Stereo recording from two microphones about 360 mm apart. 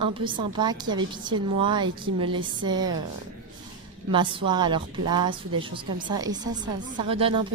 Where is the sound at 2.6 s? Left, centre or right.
Centre.